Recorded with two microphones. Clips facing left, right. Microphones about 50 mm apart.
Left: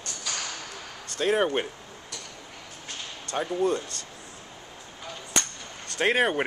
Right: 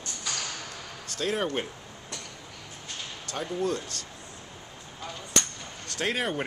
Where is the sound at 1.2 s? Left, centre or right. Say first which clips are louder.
Left 5 dB; centre.